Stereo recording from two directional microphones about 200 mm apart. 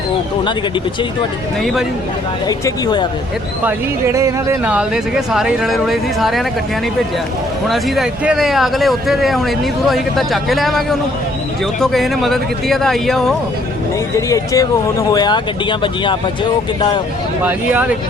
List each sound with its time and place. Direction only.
2.5 s speech: 20° left (ahead or behind)
3.6 s speech: 10° right (ahead or behind)
7.7 s speech: centre (ahead or behind)
14.2 s speech: 15° left (ahead or behind)
17.4 s speech: 5° right (ahead or behind)